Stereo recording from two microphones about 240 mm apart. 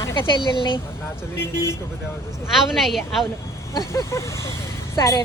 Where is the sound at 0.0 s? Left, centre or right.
Centre.